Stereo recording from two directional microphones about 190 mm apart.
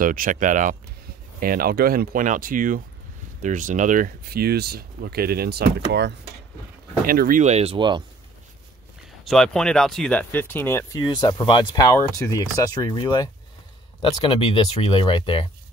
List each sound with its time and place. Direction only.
0.0 s speech: 45° right (ahead or behind); by 6.1 s 65° right (ahead or behind)
7.1 s speech: 50° right (ahead or behind); by 8.0 s 25° right (ahead or behind)
9.2 s speech: centre (ahead or behind); by 15.4 s 25° left (ahead or behind)